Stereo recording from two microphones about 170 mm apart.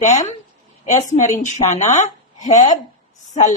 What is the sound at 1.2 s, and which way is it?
Speech, 45° left (ahead or behind).